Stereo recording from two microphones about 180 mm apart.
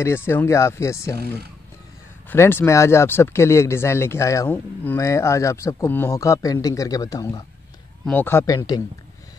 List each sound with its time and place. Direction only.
0.0 s speech: 15° left (ahead or behind)
2.2 s speech: 15° left (ahead or behind)
8.0 s speech: 10° left (ahead or behind)